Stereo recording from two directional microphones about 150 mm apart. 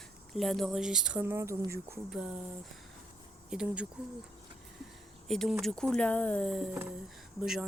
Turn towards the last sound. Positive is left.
turn(degrees=-5)  # may be behind; listen again after turning